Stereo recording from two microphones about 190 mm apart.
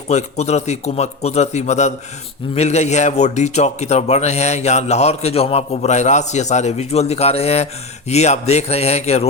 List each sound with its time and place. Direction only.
0.1 s a man's voice: 35° left (ahead or behind)